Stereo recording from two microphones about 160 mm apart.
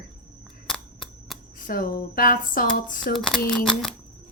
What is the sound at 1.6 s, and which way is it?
Speech, 60° left (ahead or behind).